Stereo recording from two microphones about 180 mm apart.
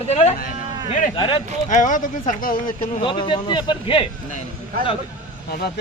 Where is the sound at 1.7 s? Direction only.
45° left (ahead or behind).